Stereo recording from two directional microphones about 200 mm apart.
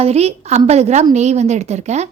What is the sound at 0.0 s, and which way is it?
A woman's voice, 30° right (ahead or behind).